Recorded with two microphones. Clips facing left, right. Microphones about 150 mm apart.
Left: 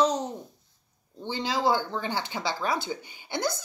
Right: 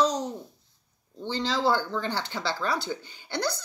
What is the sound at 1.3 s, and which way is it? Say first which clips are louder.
Speech: even; 15° left (ahead or behind).